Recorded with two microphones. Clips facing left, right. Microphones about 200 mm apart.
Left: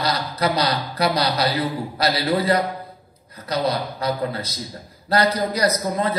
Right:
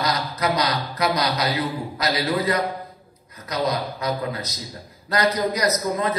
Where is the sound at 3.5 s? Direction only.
30° left (ahead or behind).